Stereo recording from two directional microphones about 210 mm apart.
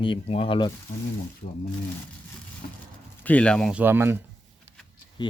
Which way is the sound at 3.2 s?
5° left (ahead or behind).